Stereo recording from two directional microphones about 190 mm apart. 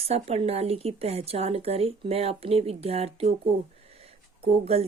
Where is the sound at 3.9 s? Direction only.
30° right (ahead or behind).